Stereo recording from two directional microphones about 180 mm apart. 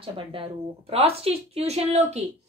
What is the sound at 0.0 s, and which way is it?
A woman's voice, 30° right (ahead or behind).